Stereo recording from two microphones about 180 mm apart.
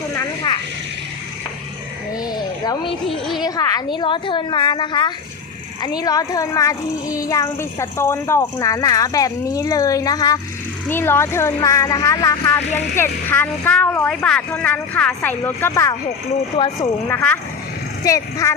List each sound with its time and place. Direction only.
2.3 s a sound: 20° left (ahead or behind)
3.4 s a child's voice: 20° left (ahead or behind)
16.6 s speech: 35° left (ahead or behind)
17.1 s speech: 10° left (ahead or behind)